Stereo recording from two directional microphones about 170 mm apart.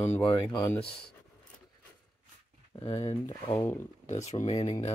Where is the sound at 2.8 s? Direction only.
35° left (ahead or behind).